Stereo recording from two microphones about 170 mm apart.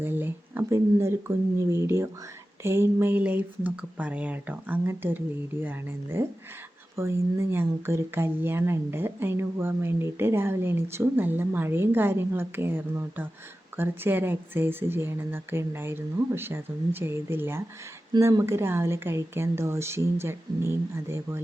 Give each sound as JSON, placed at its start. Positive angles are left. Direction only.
{"t": 0.0, "sound": "speech", "side_deg": -10}